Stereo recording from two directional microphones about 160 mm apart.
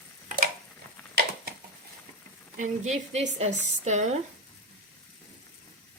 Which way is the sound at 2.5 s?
50° right (ahead or behind).